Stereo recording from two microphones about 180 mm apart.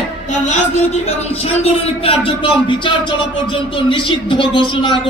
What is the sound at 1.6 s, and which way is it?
Speech, 35° left (ahead or behind).